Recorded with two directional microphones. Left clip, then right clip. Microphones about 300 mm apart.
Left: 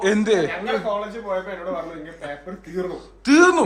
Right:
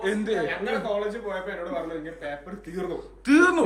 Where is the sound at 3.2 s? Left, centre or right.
Centre.